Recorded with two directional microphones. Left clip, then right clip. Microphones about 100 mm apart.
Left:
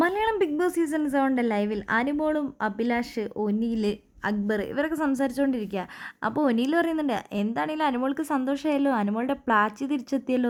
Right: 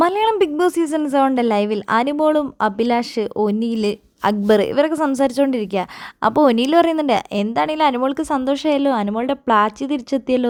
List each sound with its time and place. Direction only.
0.0 s a woman's voice: 60° right (ahead or behind)
4.3 s speech: 90° right
4.7 s a woman's voice: 55° right (ahead or behind); by 10.4 s 35° right (ahead or behind)